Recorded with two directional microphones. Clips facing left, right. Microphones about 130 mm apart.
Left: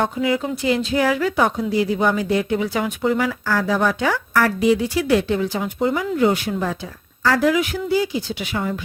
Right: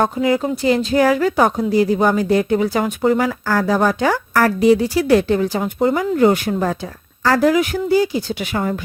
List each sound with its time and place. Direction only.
0.0 s a woman's voice: 40° right (ahead or behind)